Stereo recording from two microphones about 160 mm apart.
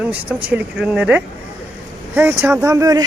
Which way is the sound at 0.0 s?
10° right (ahead or behind).